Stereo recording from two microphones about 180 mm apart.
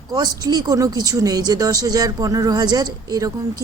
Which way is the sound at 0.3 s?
20° right (ahead or behind).